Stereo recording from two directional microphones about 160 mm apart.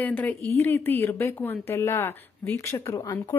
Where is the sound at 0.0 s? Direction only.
10° left (ahead or behind).